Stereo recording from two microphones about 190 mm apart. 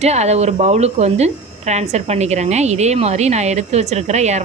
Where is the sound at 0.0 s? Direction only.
35° right (ahead or behind).